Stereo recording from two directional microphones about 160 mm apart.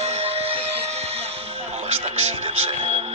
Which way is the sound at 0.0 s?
40° right (ahead or behind).